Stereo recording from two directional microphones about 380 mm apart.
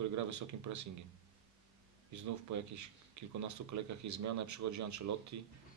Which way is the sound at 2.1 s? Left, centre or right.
Right.